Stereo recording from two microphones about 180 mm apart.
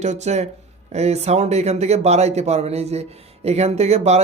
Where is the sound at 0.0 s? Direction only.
40° right (ahead or behind).